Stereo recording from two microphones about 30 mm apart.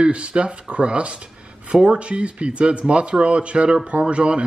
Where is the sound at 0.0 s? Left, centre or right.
Right.